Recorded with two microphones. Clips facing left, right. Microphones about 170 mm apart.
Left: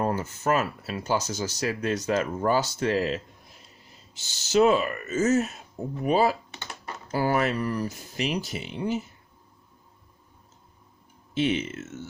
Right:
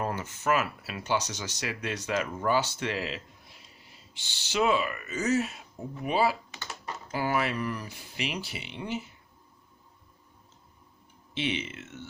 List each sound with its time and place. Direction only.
0.0 s speech: 35° left (ahead or behind)
11.3 s speech: 45° left (ahead or behind)